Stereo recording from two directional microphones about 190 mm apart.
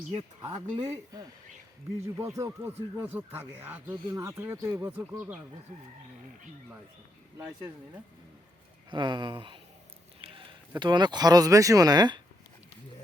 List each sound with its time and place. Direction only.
0.1 s speech: 30° right (ahead or behind); by 5.4 s 10° right (ahead or behind)
7.3 s speech: 15° right (ahead or behind)
8.9 s speech: 25° right (ahead or behind)
10.2 s a sound: 25° right (ahead or behind)
10.8 s speech: 25° right (ahead or behind)